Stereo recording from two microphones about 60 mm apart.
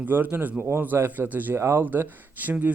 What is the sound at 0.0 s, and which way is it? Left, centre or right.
Speech, right.